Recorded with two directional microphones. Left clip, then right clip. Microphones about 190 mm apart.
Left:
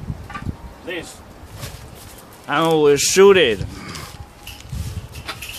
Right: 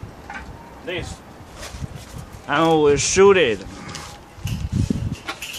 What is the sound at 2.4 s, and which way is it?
Speech, 15° left (ahead or behind).